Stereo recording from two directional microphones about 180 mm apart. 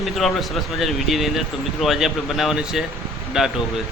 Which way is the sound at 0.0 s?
Centre (ahead or behind).